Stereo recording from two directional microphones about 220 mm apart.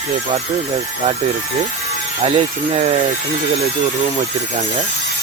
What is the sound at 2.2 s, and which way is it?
Speech, 30° right (ahead or behind).